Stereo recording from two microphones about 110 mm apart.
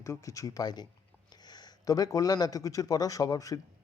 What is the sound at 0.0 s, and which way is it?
A man's voice, 30° left (ahead or behind).